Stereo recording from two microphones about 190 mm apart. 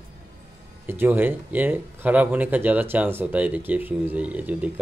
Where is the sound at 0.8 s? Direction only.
10° right (ahead or behind).